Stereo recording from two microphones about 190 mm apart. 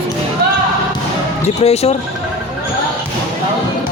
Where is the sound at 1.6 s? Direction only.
35° left (ahead or behind).